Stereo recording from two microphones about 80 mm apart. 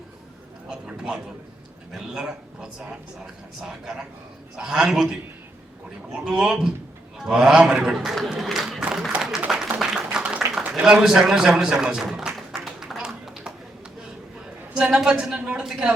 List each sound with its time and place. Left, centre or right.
0.7 s a man's voice: centre
6.2 s a man's voice: centre
8.9 s a sound: centre
14.8 s speech: centre